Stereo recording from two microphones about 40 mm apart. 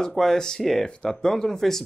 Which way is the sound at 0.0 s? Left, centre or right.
Centre.